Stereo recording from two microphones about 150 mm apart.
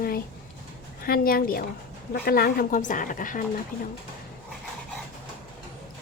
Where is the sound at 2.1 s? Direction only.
90° left; by 3.4 s 60° left (ahead or behind).